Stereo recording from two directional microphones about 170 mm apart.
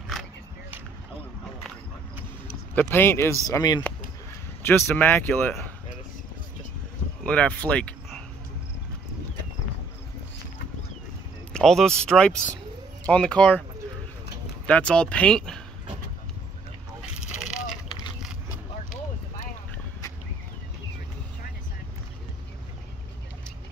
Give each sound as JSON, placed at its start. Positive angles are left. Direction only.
{"t": 2.7, "sound": "speech", "side_deg": 10}
{"t": 7.2, "sound": "speech", "side_deg": 5}
{"t": 11.5, "sound": "speech", "side_deg": 5}
{"t": 14.7, "sound": "speech", "side_deg": 5}
{"t": 17.0, "sound": "a sound", "side_deg": -5}